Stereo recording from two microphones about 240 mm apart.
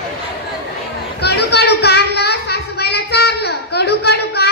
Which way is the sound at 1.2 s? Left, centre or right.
Left.